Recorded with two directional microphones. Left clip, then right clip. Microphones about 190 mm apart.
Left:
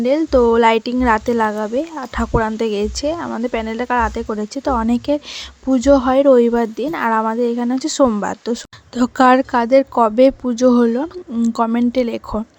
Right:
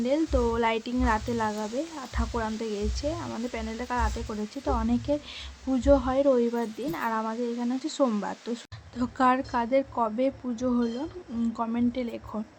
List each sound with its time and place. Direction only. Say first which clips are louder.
0.0 s speech: left 12 dB; 45° left (ahead or behind)